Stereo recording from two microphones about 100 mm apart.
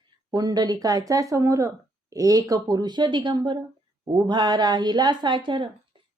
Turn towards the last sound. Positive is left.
turn(degrees=-55)  # may be behind; listen again after turning